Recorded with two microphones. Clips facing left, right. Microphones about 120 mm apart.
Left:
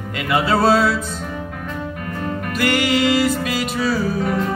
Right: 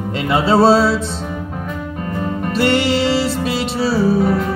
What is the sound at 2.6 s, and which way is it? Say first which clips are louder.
Music: right 2 dB; 30° right (ahead or behind).